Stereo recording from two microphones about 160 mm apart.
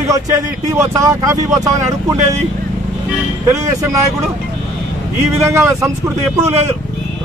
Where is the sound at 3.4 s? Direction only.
20° right (ahead or behind).